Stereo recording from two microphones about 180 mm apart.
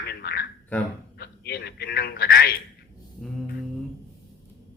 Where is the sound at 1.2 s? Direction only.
65° left (ahead or behind).